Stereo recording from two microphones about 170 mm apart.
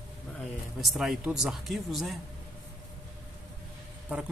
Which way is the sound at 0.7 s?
Centre (ahead or behind).